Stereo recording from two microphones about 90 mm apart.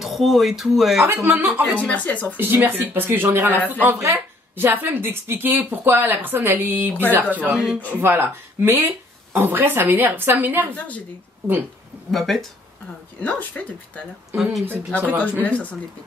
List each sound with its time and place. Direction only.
0.0 s speech: centre (ahead or behind)
1.0 s a woman's voice: 25° right (ahead or behind)
1.8 s speech: 15° left (ahead or behind)
2.3 s a woman's voice: 20° right (ahead or behind)
7.5 s speech: 10° right (ahead or behind)
7.9 s a woman's voice: 25° right (ahead or behind)
12.1 s speech: centre (ahead or behind)
13.2 s speech: 15° left (ahead or behind)
14.3 s speech: 5° right (ahead or behind)
15.0 s a woman's voice: 20° right (ahead or behind)
15.4 s speech: 15° left (ahead or behind)